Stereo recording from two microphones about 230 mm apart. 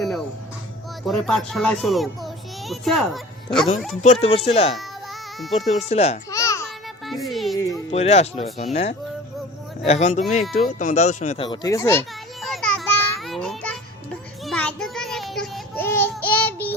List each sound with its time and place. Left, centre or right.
1.0 s a child's voice: centre
4.0 s speech: left
6.3 s babbling: centre
7.0 s speech: centre
7.9 s speech: left; by 12.0 s centre
12.4 s a sound: centre